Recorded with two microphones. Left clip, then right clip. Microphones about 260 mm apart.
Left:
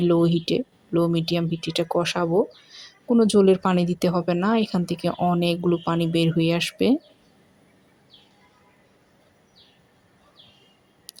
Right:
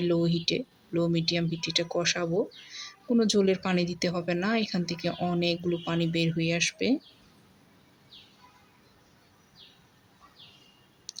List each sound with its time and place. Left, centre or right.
0.0 s speech: centre